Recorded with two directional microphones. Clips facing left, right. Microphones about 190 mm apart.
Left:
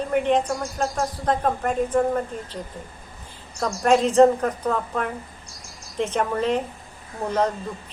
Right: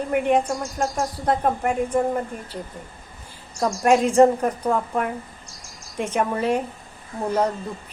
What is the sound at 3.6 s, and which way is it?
A woman's voice, 10° right (ahead or behind).